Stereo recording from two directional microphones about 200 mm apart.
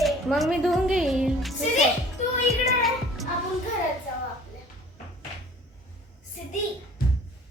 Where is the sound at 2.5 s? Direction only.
Centre (ahead or behind).